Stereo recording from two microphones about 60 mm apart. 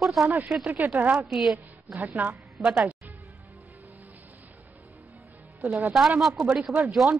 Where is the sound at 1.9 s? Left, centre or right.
Right.